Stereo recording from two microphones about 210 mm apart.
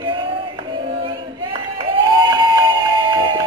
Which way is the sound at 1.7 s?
20° right (ahead or behind).